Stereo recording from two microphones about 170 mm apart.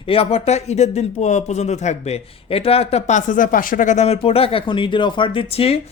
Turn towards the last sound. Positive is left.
turn(degrees=35)  # may be behind; listen again after turning